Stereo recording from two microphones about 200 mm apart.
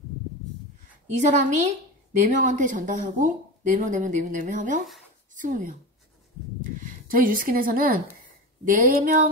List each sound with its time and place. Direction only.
1.2 s speech: 40° right (ahead or behind)
6.8 s speech: 45° right (ahead or behind)
8.6 s a sound: 45° right (ahead or behind)